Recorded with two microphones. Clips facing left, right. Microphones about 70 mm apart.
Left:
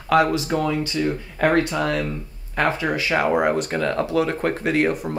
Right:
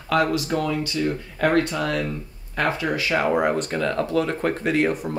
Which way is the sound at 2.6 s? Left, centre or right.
Left.